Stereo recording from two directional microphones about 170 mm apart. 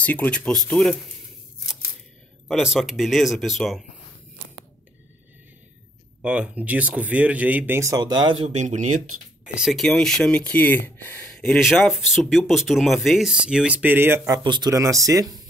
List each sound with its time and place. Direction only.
0.0 s speech: 10° left (ahead or behind)
2.4 s speech: 5° right (ahead or behind)
6.2 s speech: 10° right (ahead or behind); by 8.5 s 30° right (ahead or behind)
8.5 s speech: 45° right (ahead or behind)
9.4 s speech: 5° right (ahead or behind)
14.4 s speech: 25° right (ahead or behind)